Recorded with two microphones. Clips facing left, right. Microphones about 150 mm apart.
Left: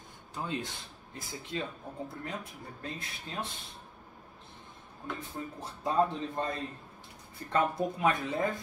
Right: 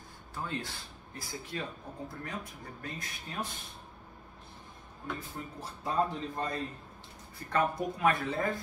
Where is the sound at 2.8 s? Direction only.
25° left (ahead or behind).